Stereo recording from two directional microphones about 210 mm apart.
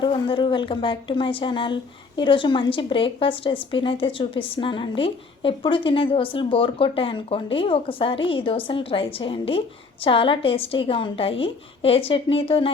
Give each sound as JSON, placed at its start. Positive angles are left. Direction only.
{"t": 0.0, "sound": "a woman's voice", "side_deg": 25}